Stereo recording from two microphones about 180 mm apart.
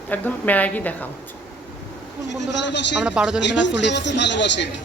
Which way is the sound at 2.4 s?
75° left (ahead or behind).